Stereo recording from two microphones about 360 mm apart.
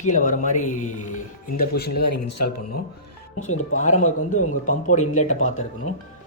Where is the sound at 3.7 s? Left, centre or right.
Left.